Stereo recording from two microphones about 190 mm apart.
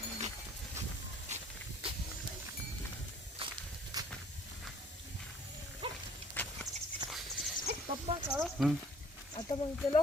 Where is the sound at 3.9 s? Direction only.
20° right (ahead or behind).